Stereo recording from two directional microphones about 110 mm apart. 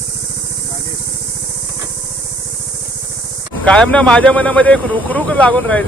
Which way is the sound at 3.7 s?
10° left (ahead or behind).